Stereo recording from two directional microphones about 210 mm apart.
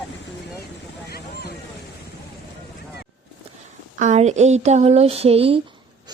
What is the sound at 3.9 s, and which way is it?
Speech, 35° right (ahead or behind).